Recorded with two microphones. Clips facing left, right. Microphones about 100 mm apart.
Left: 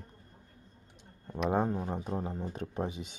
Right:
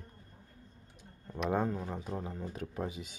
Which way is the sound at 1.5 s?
20° left (ahead or behind).